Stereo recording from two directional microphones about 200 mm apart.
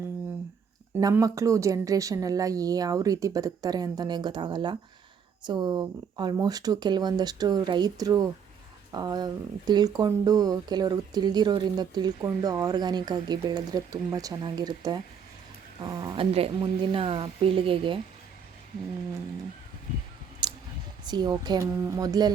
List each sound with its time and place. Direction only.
0.9 s speech: 15° right (ahead or behind)
20.4 s a sound: 25° right (ahead or behind)
21.1 s speech: 20° right (ahead or behind)